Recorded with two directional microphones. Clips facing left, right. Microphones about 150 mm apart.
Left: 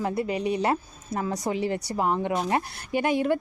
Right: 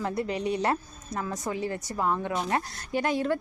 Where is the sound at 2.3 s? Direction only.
5° left (ahead or behind).